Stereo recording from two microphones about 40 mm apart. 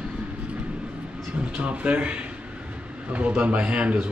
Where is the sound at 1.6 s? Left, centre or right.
Right.